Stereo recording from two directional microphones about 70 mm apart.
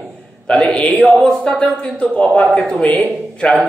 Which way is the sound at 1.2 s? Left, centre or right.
Centre.